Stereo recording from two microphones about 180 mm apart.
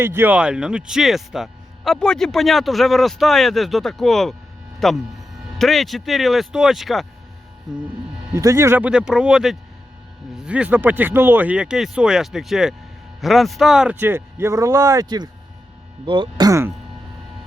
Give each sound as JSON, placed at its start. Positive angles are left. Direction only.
{"t": 0.0, "sound": "speech", "side_deg": -10}
{"t": 8.4, "sound": "speech", "side_deg": -15}